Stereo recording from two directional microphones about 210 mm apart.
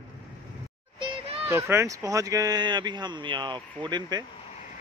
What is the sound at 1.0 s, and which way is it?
Children playing, 30° right (ahead or behind).